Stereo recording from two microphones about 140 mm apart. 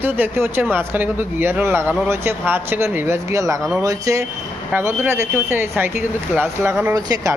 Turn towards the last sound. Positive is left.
turn(degrees=-25)  # may be behind; listen again after turning